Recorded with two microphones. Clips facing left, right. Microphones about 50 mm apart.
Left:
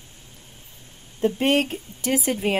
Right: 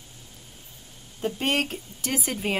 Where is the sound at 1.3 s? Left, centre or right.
Left.